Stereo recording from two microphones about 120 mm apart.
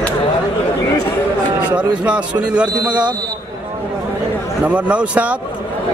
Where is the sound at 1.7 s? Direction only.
10° right (ahead or behind).